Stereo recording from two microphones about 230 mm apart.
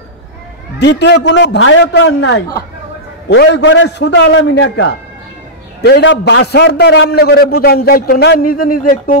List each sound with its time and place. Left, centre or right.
0.7 s a man's voice: left